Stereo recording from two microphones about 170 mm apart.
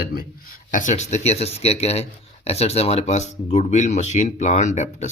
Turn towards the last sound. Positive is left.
turn(degrees=45)  # may be behind; listen again after turning